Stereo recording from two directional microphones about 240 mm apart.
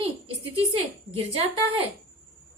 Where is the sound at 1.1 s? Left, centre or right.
Right.